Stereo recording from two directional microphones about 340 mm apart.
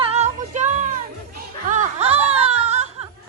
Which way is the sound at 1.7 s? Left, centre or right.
Centre.